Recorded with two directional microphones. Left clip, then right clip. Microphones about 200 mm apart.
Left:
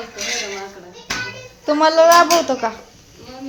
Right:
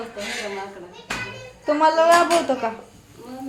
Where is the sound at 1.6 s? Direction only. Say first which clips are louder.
Left 4 dB; 15° left (ahead or behind).